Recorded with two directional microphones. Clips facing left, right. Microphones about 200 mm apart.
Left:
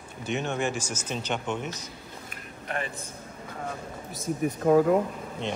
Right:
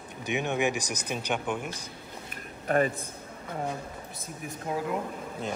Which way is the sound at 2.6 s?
40° right (ahead or behind).